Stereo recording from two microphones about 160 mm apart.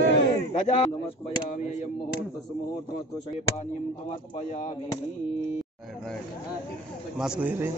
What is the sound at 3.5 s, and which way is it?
Speech, 45° left (ahead or behind).